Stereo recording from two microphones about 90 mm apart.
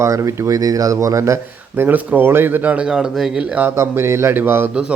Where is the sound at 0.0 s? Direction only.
35° right (ahead or behind); by 3.4 s 5° right (ahead or behind).